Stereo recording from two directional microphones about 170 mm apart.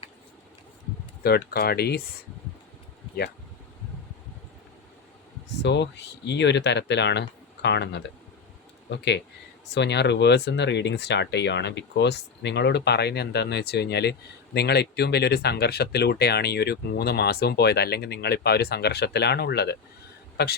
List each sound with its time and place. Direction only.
1.2 s speech: 70° left (ahead or behind)
5.6 s a man's voice: 90° left; by 20.6 s 70° left (ahead or behind)